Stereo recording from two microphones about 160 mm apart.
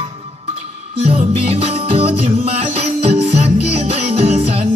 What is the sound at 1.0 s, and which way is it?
Music, 40° right (ahead or behind).